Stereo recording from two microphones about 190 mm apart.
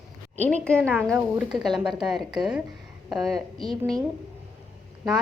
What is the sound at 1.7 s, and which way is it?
Speech, 25° right (ahead or behind).